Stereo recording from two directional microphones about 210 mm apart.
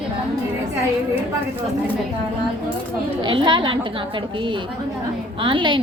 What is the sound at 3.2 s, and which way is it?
Speech, 25° right (ahead or behind).